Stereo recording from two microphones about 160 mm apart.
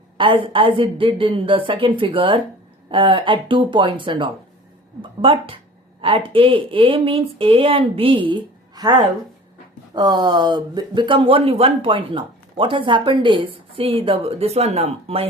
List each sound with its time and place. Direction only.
0.2 s speech: 30° right (ahead or behind)